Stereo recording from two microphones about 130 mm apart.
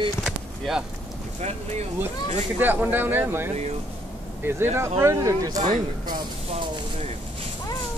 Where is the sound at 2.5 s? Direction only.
15° right (ahead or behind).